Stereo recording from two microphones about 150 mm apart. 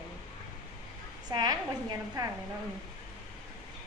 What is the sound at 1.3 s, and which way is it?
A woman's voice, 25° right (ahead or behind).